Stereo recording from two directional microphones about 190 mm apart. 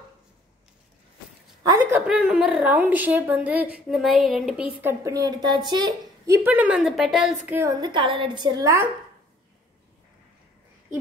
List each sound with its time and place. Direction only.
1.6 s a woman's voice: 15° right (ahead or behind)
5.0 s a woman's voice: 20° right (ahead or behind); by 7.3 s centre (ahead or behind)
7.4 s a woman's voice: 15° right (ahead or behind)